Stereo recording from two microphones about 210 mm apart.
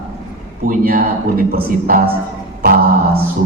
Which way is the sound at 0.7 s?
40° right (ahead or behind).